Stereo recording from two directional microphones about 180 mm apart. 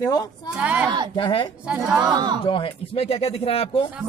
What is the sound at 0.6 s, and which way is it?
Speech, 5° right (ahead or behind).